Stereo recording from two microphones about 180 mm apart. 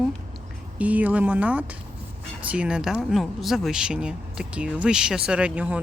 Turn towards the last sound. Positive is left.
turn(degrees=-5)  # may be behind; listen again after turning